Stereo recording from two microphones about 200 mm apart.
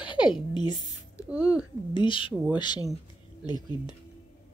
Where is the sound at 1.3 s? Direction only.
5° right (ahead or behind).